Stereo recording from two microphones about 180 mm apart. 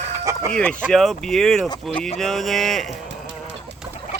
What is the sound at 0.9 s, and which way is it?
Speech, centre (ahead or behind).